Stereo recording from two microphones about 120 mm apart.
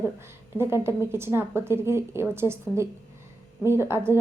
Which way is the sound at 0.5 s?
20° right (ahead or behind).